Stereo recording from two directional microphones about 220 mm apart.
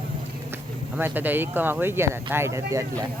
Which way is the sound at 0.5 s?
10° right (ahead or behind).